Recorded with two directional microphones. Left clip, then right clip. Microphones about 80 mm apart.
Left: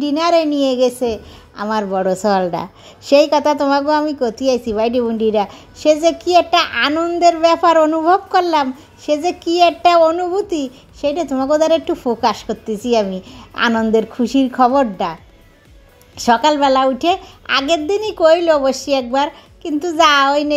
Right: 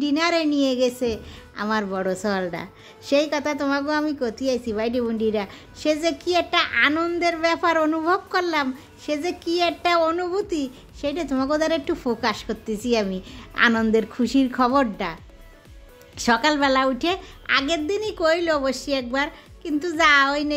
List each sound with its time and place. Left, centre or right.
0.0 s a woman's voice: centre
2.0 s a woman's voice: left
6.9 s a woman's voice: centre
7.2 s a woman's voice: left
10.3 s a woman's voice: left
13.6 s a woman's voice: left
14.1 s a woman's voice: centre
16.2 s a woman's voice: centre
17.5 s a woman's voice: left